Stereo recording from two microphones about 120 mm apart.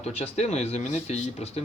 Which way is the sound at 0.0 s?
65° left (ahead or behind).